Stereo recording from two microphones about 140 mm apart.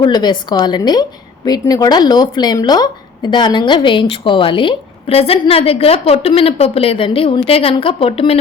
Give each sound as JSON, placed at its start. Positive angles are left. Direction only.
{"t": 0.0, "sound": "a woman's voice", "side_deg": 30}